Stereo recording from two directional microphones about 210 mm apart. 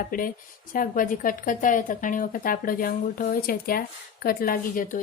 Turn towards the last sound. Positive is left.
turn(degrees=40)  # may be behind; listen again after turning